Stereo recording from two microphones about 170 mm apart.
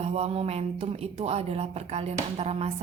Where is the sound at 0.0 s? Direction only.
35° right (ahead or behind).